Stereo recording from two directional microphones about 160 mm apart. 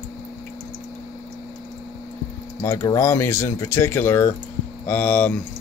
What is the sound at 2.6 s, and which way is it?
Speech, 20° left (ahead or behind).